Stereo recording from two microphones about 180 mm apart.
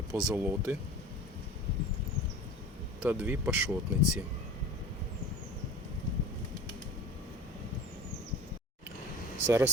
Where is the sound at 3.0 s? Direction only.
10° right (ahead or behind).